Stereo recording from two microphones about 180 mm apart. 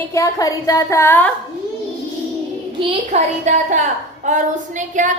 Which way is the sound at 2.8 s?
35° right (ahead or behind).